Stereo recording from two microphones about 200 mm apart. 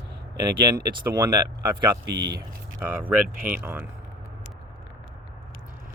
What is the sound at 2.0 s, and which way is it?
Speech, 55° right (ahead or behind).